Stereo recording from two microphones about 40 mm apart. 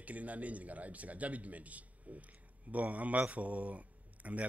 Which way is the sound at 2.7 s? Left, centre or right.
Right.